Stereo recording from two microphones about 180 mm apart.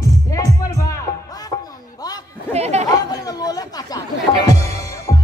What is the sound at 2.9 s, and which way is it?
Speech, 20° left (ahead or behind).